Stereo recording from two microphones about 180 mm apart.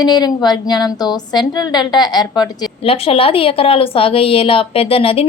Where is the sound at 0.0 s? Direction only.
20° left (ahead or behind).